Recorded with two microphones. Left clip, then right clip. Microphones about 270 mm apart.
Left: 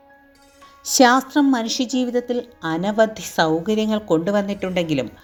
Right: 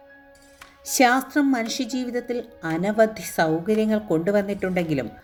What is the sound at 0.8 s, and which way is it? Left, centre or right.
Speech, centre.